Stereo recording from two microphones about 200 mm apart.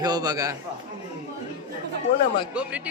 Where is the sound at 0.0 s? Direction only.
20° right (ahead or behind).